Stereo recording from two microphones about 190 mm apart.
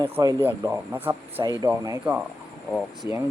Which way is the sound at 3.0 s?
15° right (ahead or behind).